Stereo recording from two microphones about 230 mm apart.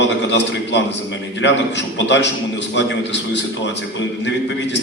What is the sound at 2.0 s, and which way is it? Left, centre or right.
Speech, left.